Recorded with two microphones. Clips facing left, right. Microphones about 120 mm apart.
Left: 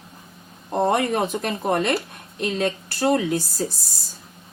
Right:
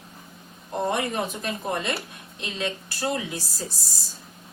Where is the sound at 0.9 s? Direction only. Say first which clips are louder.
Left 6 dB; 60° left (ahead or behind).